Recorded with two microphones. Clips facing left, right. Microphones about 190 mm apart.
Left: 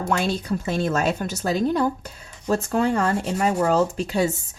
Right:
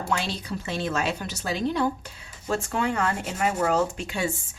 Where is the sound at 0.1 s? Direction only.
45° left (ahead or behind).